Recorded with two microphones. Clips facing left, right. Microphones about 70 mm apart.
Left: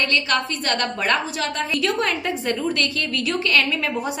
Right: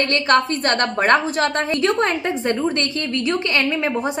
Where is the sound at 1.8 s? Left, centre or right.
Right.